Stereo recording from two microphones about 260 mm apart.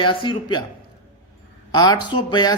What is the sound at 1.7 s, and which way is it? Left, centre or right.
Speech, centre.